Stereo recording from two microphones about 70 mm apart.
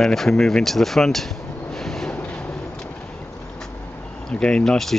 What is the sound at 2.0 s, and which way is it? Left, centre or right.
Train, centre.